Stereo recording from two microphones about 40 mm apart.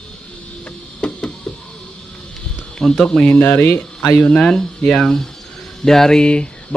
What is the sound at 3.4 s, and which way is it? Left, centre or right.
Speech, left.